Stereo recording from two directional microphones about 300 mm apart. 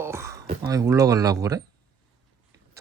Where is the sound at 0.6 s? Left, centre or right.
Centre.